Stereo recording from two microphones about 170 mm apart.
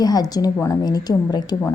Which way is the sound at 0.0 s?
25° left (ahead or behind).